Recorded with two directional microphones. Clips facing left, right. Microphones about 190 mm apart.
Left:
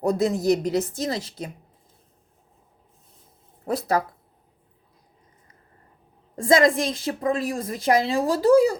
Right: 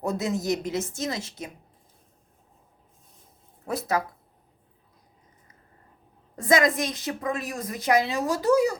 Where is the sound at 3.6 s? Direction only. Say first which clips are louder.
Left 4 dB; 35° left (ahead or behind).